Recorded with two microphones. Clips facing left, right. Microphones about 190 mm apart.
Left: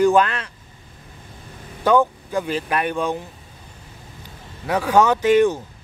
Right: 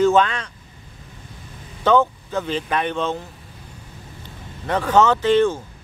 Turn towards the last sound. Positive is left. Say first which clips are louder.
# left 1 dB
turn(degrees=15)  # may be behind; listen again after turning